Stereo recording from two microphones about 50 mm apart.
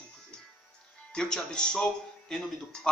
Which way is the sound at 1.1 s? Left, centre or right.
Centre.